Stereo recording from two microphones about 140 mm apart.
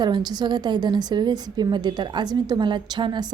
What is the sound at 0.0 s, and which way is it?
A woman's voice, 30° right (ahead or behind).